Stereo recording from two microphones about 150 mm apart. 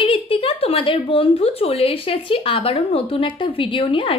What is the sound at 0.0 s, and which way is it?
A woman's voice, 35° left (ahead or behind).